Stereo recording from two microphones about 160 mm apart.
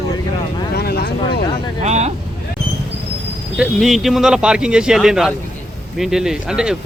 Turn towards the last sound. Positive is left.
turn(degrees=-5)  # may be behind; listen again after turning